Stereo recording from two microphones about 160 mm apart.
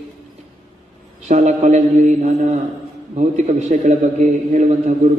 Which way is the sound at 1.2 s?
50° right (ahead or behind).